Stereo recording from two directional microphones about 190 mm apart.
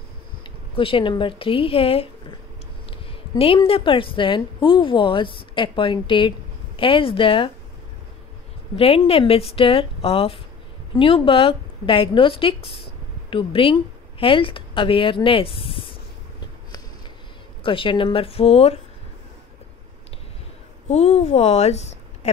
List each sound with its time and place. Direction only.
0.7 s a woman's voice: 25° left (ahead or behind)
8.7 s a woman's voice: 30° left (ahead or behind)
17.6 s a woman's voice: 25° left (ahead or behind)
20.9 s speech: 35° left (ahead or behind)